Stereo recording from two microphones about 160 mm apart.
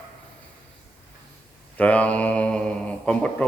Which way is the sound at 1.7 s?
10° left (ahead or behind).